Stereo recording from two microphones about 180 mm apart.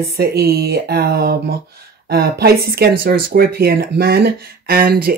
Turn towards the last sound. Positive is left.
turn(degrees=-55)  # may be behind; listen again after turning